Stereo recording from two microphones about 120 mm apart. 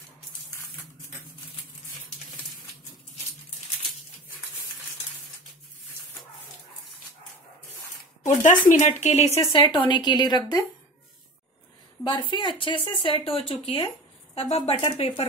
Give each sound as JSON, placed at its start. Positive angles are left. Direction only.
{"t": 8.2, "sound": "speech", "side_deg": 75}
{"t": 9.5, "sound": "speech", "side_deg": 40}
{"t": 12.0, "sound": "speech", "side_deg": 45}